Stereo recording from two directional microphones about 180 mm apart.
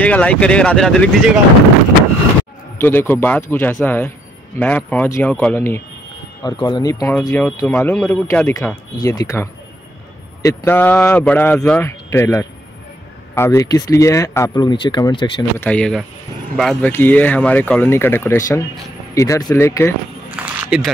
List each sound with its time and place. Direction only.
0.0 s speech: 10° left (ahead or behind)
2.8 s speech: 10° left (ahead or behind)
6.4 s speech: 25° left (ahead or behind)
15.6 s speech: 5° left (ahead or behind)
20.2 s a sound: 5° right (ahead or behind)